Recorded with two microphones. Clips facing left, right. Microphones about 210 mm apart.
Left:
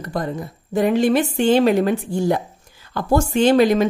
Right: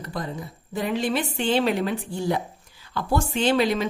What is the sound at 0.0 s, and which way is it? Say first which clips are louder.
Speech: left 6 dB; 45° left (ahead or behind).